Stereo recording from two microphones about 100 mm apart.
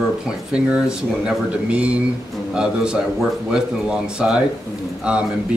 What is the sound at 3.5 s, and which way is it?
Speech, 10° right (ahead or behind).